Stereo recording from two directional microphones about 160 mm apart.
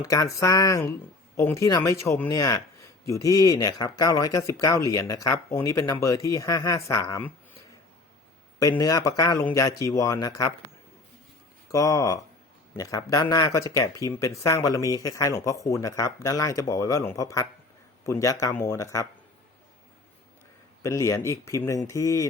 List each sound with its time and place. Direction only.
0.0 s speech: 20° left (ahead or behind)
8.8 s speech: 20° left (ahead or behind)
11.7 s speech: 20° left (ahead or behind)
20.8 s speech: 20° left (ahead or behind)